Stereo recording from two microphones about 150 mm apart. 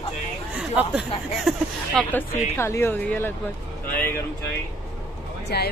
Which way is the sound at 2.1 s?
15° left (ahead or behind).